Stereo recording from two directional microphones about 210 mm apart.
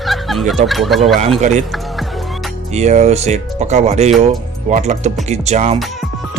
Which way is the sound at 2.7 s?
30° right (ahead or behind).